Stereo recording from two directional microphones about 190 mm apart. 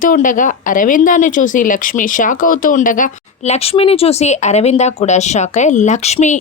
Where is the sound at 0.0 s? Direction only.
45° left (ahead or behind).